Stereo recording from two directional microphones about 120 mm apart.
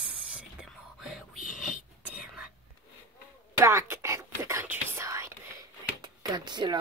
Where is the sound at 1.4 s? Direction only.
90° left.